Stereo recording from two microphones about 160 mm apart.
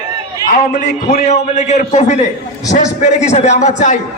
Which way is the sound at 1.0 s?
45° left (ahead or behind).